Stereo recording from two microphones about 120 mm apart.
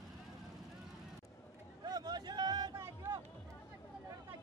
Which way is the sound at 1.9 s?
35° right (ahead or behind).